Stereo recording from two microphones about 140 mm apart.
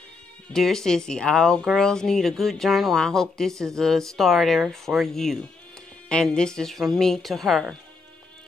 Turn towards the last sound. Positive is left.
turn(degrees=0)  # may be behind; listen again after turning